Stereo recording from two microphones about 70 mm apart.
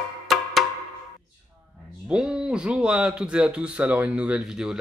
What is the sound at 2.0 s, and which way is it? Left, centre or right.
Speech, centre.